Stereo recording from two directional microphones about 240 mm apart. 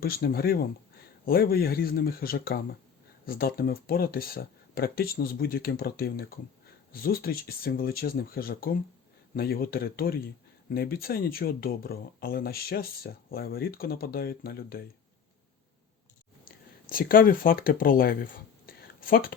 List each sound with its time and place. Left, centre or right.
0.0 s speech: left
16.9 s speech: left